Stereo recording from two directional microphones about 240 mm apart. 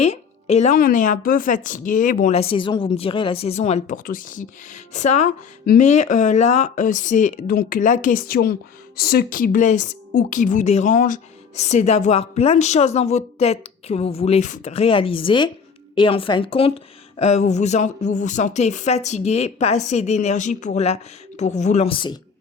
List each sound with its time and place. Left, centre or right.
0.0 s speech: left